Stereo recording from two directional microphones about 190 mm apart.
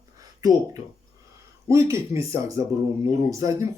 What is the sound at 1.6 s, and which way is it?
Speech, 15° right (ahead or behind).